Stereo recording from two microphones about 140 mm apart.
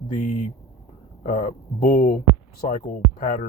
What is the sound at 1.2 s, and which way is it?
Speech, 65° left (ahead or behind).